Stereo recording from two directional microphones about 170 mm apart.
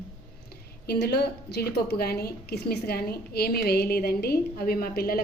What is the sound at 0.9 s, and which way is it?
A woman's voice, 75° left (ahead or behind).